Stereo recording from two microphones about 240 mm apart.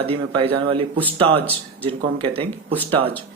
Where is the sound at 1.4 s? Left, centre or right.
Centre.